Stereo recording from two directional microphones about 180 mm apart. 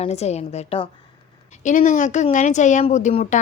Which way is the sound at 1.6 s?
45° left (ahead or behind).